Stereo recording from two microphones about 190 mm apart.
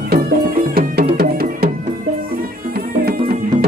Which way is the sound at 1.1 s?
55° right (ahead or behind).